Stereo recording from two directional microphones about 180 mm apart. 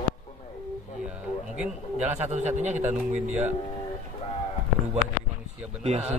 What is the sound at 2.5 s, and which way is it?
Speech, 40° right (ahead or behind).